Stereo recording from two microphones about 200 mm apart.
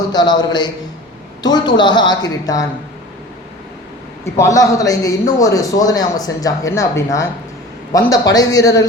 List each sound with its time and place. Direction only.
0.1 s a woman's voice: 20° left (ahead or behind)
4.4 s speech: 15° left (ahead or behind)